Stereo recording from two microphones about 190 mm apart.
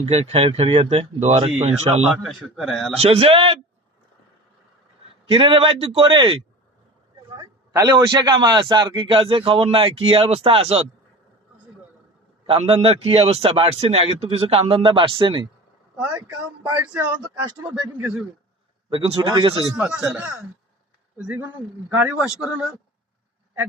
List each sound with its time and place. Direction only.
0.0 s a man's voice: 35° right (ahead or behind)
2.0 s a man's voice: centre (ahead or behind)
3.0 s a man's voice: 30° right (ahead or behind)
5.3 s a man's voice: 30° right (ahead or behind)
12.5 s a man's voice: 30° right (ahead or behind)
16.0 s speech: 5° right (ahead or behind)
18.9 s a man's voice: 25° right (ahead or behind)
19.8 s a man's voice: 5° right (ahead or behind)